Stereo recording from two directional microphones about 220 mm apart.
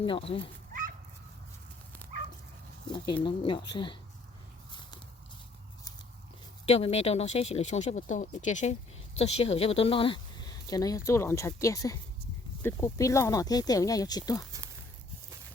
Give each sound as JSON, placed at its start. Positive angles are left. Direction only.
{"t": 0.0, "sound": "speech", "side_deg": 25}
{"t": 3.2, "sound": "speech", "side_deg": 20}
{"t": 6.7, "sound": "speech", "side_deg": 30}